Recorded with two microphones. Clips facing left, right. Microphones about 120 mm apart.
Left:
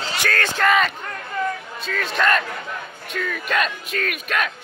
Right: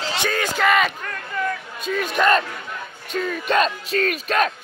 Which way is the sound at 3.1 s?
30° right (ahead or behind).